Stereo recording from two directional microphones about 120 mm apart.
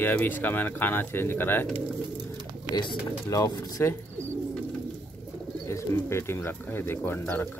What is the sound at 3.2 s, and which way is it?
Speech, 25° left (ahead or behind).